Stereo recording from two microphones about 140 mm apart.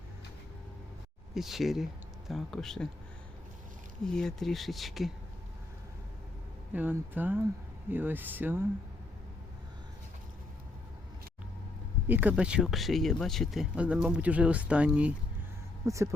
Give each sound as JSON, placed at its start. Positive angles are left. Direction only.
{"t": 1.3, "sound": "speech", "side_deg": 0}
{"t": 4.0, "sound": "speech", "side_deg": 5}
{"t": 6.7, "sound": "speech", "side_deg": -15}
{"t": 12.0, "sound": "speech", "side_deg": -15}
{"t": 15.9, "sound": "speech", "side_deg": -20}